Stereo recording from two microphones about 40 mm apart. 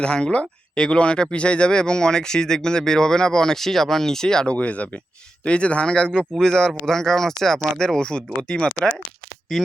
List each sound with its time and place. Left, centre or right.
0.0 s speech: left
4.4 s speech: left; by 7.6 s centre
7.9 s speech: left